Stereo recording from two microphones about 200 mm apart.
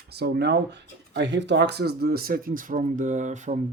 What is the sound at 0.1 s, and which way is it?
Speech, 55° right (ahead or behind).